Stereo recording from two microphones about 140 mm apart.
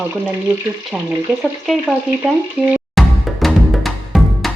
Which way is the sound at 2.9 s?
Centre (ahead or behind).